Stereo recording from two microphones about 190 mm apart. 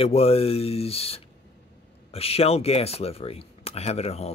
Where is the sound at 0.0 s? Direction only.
30° left (ahead or behind).